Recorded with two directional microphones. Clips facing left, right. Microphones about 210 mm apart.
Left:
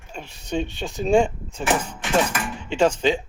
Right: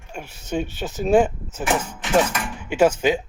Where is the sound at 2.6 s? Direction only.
5° right (ahead or behind).